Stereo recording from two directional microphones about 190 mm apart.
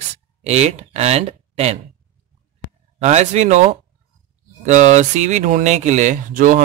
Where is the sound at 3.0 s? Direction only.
35° right (ahead or behind).